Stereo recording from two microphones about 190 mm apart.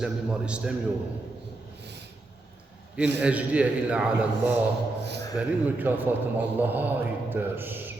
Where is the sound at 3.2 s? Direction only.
5° right (ahead or behind).